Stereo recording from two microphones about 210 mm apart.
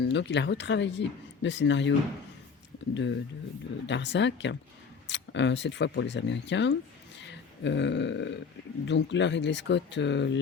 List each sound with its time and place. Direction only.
0.0 s speech: 55° left (ahead or behind)
2.9 s speech: 60° left (ahead or behind)